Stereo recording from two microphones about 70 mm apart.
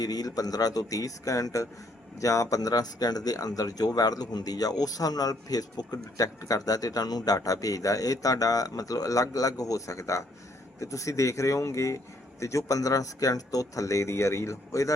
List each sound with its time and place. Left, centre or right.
0.0 s speech: left